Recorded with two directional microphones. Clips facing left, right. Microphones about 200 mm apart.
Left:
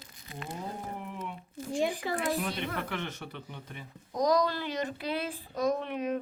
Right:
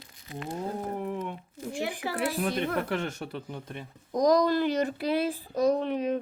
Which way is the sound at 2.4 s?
50° right (ahead or behind).